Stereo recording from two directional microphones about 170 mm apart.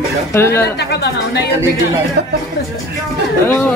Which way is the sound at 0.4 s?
15° left (ahead or behind).